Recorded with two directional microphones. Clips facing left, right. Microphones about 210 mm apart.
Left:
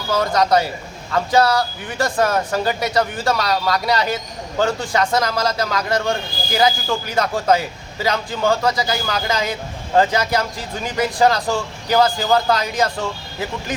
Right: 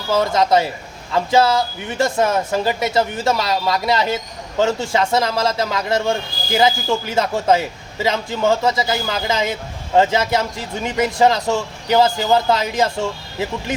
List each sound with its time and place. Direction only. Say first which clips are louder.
0.1 s a man's voice: right 1 dB; 25° right (ahead or behind)